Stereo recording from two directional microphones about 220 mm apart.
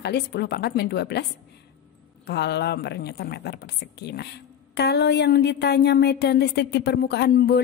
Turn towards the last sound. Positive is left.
turn(degrees=45)  # may be behind; listen again after turning